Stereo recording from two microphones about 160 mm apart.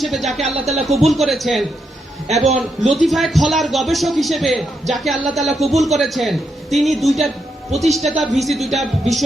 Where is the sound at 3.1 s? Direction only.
Centre (ahead or behind).